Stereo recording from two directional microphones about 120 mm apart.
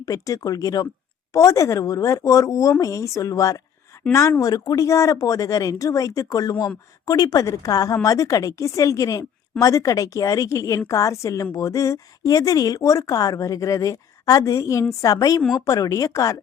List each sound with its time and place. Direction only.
0.0 s a woman's voice: 30° left (ahead or behind)